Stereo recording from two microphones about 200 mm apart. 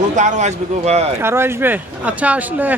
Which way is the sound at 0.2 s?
35° right (ahead or behind).